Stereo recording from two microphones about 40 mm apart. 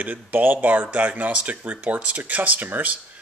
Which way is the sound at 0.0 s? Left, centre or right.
Right.